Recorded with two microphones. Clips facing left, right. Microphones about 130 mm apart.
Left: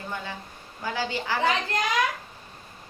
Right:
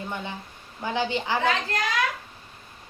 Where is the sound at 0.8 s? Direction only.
20° right (ahead or behind).